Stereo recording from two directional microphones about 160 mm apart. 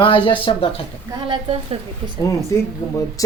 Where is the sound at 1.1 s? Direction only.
30° right (ahead or behind).